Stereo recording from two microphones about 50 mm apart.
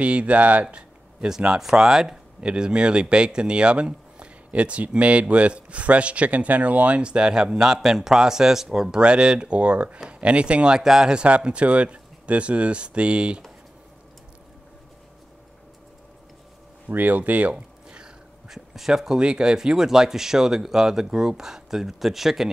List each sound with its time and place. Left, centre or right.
0.0 s speech: right
16.9 s a sound: right; by 18.6 s centre
18.8 s speech: centre